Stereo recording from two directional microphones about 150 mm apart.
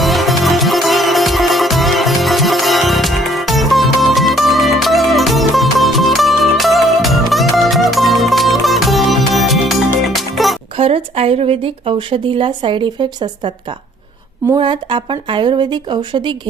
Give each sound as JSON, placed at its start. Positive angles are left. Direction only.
{"t": 0.0, "sound": "music", "side_deg": 0}
{"t": 10.8, "sound": "speech", "side_deg": -40}